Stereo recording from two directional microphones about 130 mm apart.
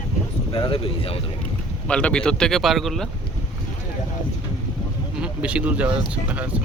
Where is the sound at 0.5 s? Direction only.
45° left (ahead or behind).